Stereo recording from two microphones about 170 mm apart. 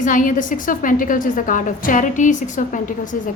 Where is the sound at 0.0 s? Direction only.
50° left (ahead or behind).